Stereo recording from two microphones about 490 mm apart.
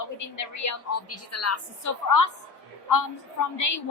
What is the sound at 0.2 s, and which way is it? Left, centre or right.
A woman's voice, left.